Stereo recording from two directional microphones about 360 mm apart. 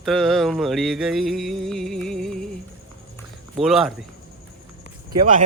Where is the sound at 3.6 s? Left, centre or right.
Centre.